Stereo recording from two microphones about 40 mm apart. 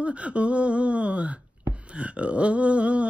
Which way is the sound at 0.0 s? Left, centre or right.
Right.